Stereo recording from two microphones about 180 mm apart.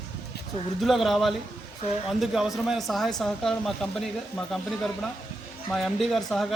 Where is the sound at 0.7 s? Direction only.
Centre (ahead or behind).